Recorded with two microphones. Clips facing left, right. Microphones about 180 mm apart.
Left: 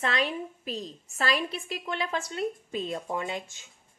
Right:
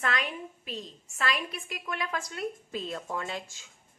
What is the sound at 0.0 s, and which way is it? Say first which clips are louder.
A woman's voice: left 3 dB; 30° left (ahead or behind).